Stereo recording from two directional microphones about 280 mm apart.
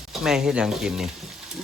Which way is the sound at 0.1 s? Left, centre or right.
Centre.